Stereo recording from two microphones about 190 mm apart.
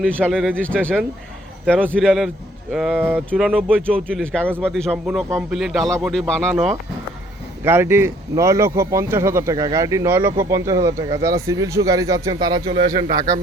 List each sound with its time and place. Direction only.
0.0 s speech: 5° left (ahead or behind)
7.6 s speech: 10° right (ahead or behind)